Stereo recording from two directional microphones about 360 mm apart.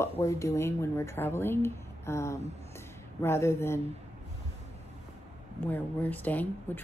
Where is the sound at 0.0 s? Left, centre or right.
Centre.